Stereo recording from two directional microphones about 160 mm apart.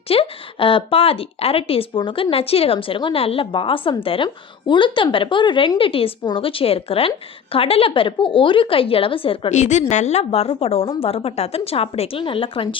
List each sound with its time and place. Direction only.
0.1 s speech: 35° left (ahead or behind)